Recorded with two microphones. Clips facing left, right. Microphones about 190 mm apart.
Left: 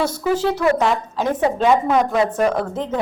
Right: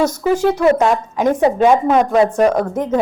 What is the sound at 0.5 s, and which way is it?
A woman's voice, 20° right (ahead or behind).